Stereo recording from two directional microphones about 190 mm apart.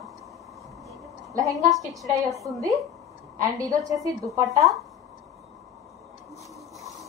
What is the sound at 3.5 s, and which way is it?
Speech, 20° right (ahead or behind).